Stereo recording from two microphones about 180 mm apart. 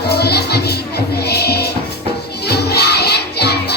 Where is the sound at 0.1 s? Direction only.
65° left (ahead or behind).